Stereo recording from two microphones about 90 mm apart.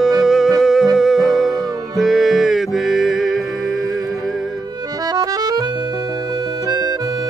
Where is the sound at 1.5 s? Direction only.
50° right (ahead or behind).